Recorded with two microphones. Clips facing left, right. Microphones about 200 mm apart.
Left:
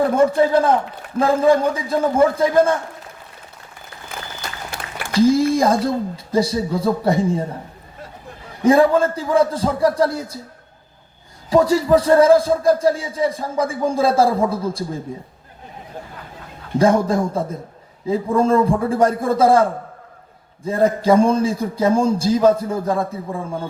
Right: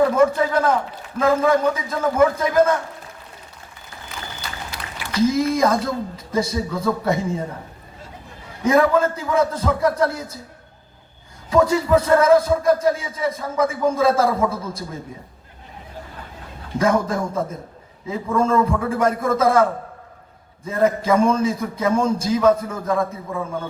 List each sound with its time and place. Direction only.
0.0 s a man's voice: 30° left (ahead or behind)
5.1 s a man's voice: 30° left (ahead or behind)
8.6 s a man's voice: 30° left (ahead or behind)
11.4 s a man's voice: 35° left (ahead or behind)
16.7 s a man's voice: 30° left (ahead or behind)
20.7 s a man's voice: 30° left (ahead or behind)